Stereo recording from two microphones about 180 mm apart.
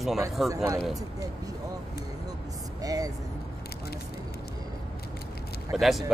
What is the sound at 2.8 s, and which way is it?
Vehicle, 20° right (ahead or behind).